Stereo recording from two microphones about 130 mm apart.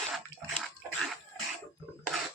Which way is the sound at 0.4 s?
Centre (ahead or behind).